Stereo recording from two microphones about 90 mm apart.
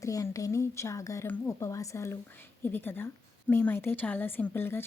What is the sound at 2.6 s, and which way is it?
A woman's voice, 25° left (ahead or behind).